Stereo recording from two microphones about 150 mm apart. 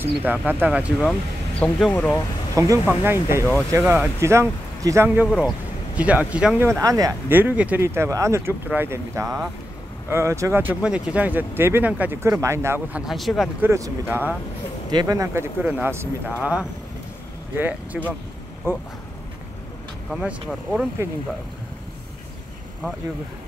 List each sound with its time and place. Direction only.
0.0 s speech: 10° right (ahead or behind)
1.6 s speech: 5° left (ahead or behind)
2.5 s speech: 20° right (ahead or behind)
6.7 s speech: 20° right (ahead or behind)
13.0 s speech: centre (ahead or behind)
13.6 s speech: 20° right (ahead or behind)
20.1 s speech: 5° right (ahead or behind)
21.0 s speech: 15° right (ahead or behind)